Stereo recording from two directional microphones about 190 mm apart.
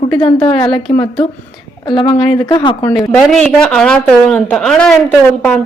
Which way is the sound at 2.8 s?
10° left (ahead or behind).